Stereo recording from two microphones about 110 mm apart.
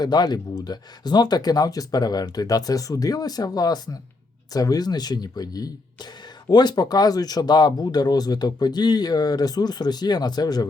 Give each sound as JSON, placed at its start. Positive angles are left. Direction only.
{"t": 0.0, "sound": "speech", "side_deg": 40}